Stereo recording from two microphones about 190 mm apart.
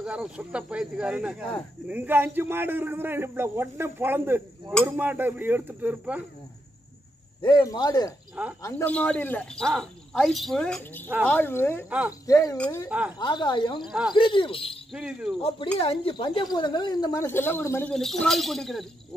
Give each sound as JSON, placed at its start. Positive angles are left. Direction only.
{"t": 0.0, "sound": "a man's voice", "side_deg": -5}
{"t": 7.4, "sound": "speech", "side_deg": 20}
{"t": 12.5, "sound": "speech", "side_deg": 5}
{"t": 13.2, "sound": "speech", "side_deg": 25}
{"t": 13.8, "sound": "speech", "side_deg": -5}
{"t": 14.1, "sound": "speech", "side_deg": 25}
{"t": 14.9, "sound": "speech", "side_deg": -5}
{"t": 15.4, "sound": "speech", "side_deg": 30}